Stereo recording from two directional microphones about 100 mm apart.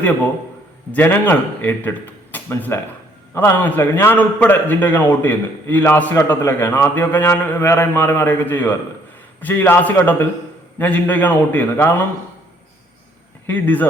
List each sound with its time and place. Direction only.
0.9 s a man's voice: 20° left (ahead or behind)
13.5 s a man's voice: 20° left (ahead or behind)